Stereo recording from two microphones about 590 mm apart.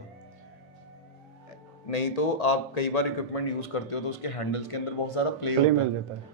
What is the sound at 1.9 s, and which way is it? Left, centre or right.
A man's voice, left.